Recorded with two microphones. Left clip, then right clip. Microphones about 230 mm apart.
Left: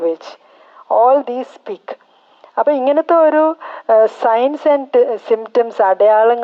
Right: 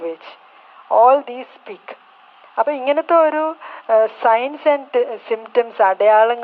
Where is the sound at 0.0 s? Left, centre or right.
Left.